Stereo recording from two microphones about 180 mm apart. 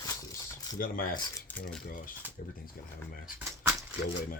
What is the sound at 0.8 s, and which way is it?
Speech, 55° left (ahead or behind).